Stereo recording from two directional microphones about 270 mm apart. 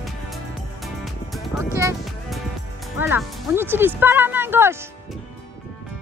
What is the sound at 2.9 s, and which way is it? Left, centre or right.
Speech, centre.